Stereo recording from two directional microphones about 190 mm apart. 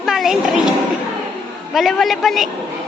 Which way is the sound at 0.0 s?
Centre (ahead or behind).